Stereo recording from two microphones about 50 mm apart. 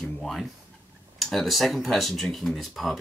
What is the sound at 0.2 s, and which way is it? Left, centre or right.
Speech, centre.